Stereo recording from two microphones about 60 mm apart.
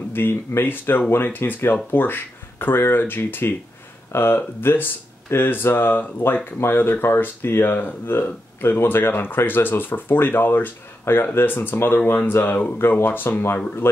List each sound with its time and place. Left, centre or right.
0.1 s speech: left